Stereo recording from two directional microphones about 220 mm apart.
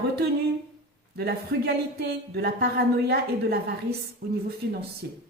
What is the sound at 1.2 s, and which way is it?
Speech, 45° right (ahead or behind).